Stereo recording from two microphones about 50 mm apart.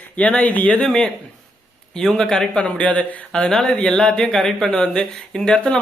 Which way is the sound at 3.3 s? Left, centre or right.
Centre.